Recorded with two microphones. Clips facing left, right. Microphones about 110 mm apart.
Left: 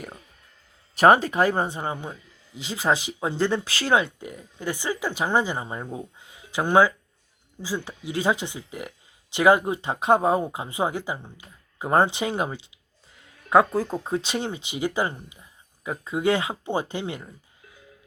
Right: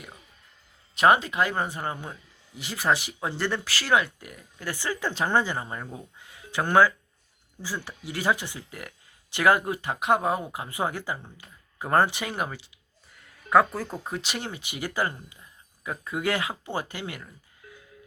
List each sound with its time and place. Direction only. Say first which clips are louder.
0.9 s speech: left 4 dB; 40° left (ahead or behind); by 12.5 s 25° left (ahead or behind)
13.2 s music: left 2 dB; 20° left (ahead or behind)
13.7 s speech: left 7 dB; 15° left (ahead or behind)